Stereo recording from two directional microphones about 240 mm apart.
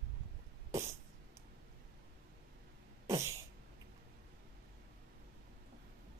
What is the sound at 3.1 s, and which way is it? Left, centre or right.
Sneeze, centre.